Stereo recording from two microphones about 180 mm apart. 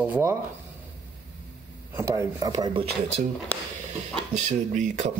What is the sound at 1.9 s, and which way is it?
Speech, 15° right (ahead or behind).